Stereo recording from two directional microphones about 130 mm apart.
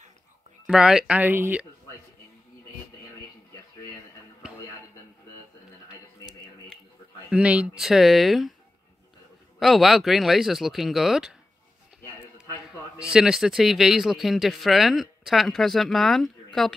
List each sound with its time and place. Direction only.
0.7 s speech: 5° right (ahead or behind)
7.2 s speech: 10° right (ahead or behind)
9.6 s speech: centre (ahead or behind)
12.0 s a sound: 20° left (ahead or behind)
13.1 s speech: 5° right (ahead or behind)